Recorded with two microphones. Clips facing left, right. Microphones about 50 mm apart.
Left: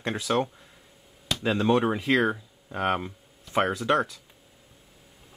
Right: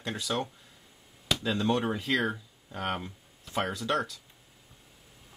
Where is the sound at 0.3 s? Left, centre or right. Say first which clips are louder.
Left 7 dB; left.